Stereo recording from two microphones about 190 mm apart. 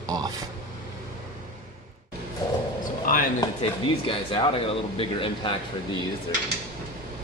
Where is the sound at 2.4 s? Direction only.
20° left (ahead or behind).